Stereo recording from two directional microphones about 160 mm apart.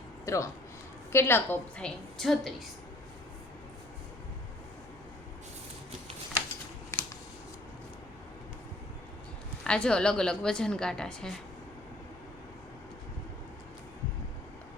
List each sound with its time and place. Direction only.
0.3 s a woman's voice: 20° left (ahead or behind); by 2.5 s centre (ahead or behind)
6.9 s shuffling cards: 15° left (ahead or behind)
9.6 s a woman's voice: 5° left (ahead or behind)